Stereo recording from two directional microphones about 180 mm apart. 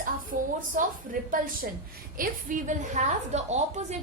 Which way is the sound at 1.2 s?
50° right (ahead or behind).